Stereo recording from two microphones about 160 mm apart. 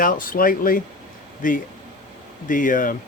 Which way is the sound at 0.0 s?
60° left (ahead or behind).